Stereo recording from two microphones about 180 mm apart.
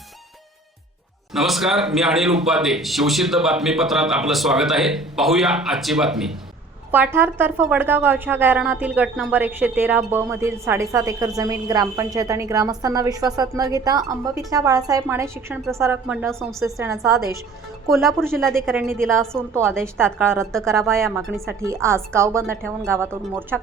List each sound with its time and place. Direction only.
1.3 s a man's voice: centre (ahead or behind); by 17.0 s 15° right (ahead or behind)
17.8 s a man's voice: centre (ahead or behind)
18.7 s a woman's voice: 10° right (ahead or behind)
19.0 s a man's voice: 5° left (ahead or behind)
19.5 s a woman's voice: 15° right (ahead or behind)